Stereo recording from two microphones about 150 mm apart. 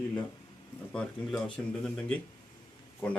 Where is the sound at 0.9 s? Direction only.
5° left (ahead or behind).